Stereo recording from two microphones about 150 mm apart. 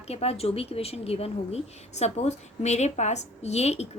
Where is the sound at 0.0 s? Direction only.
45° left (ahead or behind).